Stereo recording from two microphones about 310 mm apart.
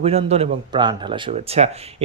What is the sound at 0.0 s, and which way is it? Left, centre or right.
A man's voice, centre.